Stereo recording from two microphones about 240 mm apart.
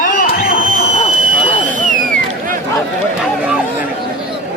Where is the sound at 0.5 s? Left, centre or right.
Right.